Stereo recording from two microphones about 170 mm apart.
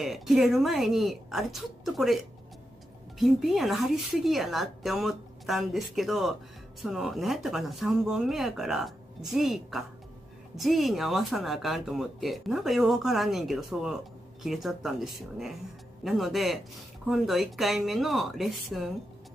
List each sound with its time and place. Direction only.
0.0 s speech: centre (ahead or behind)